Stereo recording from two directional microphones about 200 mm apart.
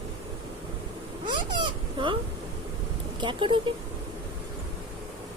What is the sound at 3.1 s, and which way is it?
Speech, 25° right (ahead or behind).